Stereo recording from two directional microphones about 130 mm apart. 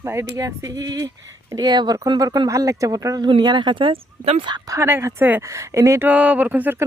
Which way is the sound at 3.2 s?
35° right (ahead or behind).